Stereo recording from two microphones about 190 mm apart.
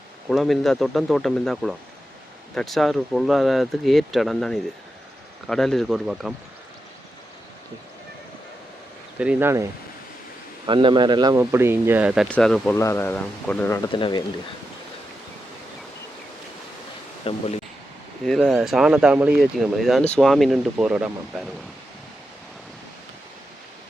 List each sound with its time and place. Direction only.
0.3 s speech: centre (ahead or behind)
9.1 s speech: 5° right (ahead or behind)
10.7 s speech: 25° right (ahead or behind); by 12.7 s centre (ahead or behind)
12.7 s speech: 15° left (ahead or behind)
13.9 s speech: 25° left (ahead or behind)
17.2 s speech: 35° left (ahead or behind)
18.3 s speech: centre (ahead or behind)